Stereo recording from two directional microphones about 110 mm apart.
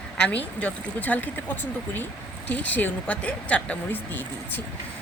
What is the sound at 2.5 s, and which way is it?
Speech, 15° left (ahead or behind).